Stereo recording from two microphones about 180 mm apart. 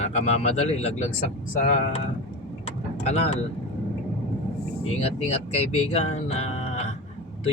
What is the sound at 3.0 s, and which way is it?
Speech, 35° left (ahead or behind).